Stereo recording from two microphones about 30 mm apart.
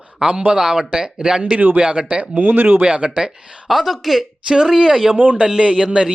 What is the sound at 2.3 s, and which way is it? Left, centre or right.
Speech, right.